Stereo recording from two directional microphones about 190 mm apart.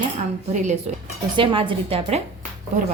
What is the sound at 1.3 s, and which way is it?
Speech, 25° right (ahead or behind).